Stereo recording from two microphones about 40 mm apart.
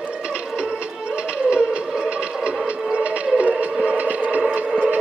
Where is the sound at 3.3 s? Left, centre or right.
Right.